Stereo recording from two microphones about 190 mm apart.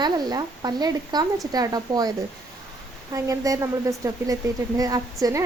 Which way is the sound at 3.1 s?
20° right (ahead or behind).